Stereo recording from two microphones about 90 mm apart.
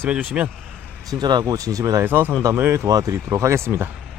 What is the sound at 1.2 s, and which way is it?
Speech, 60° right (ahead or behind).